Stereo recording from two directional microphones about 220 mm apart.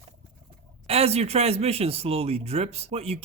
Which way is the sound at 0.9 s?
25° right (ahead or behind).